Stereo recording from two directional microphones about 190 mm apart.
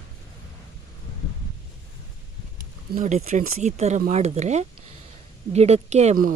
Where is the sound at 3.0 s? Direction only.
40° right (ahead or behind).